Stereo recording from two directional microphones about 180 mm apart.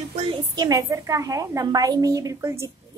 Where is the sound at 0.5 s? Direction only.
20° right (ahead or behind).